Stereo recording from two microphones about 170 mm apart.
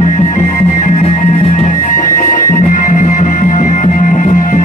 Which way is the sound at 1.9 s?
50° left (ahead or behind).